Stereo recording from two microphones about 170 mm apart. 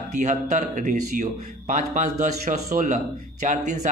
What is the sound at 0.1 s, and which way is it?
A man's voice, 45° right (ahead or behind).